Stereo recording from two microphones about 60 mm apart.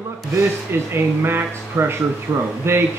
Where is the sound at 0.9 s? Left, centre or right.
Right.